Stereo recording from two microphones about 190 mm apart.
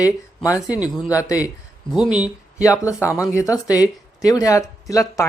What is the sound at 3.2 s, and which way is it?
Speech, 15° left (ahead or behind).